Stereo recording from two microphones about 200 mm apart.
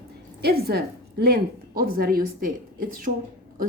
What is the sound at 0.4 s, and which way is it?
A woman's voice, 50° right (ahead or behind).